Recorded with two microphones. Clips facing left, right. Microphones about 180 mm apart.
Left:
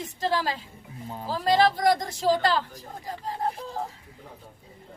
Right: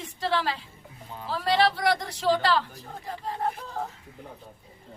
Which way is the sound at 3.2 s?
30° left (ahead or behind).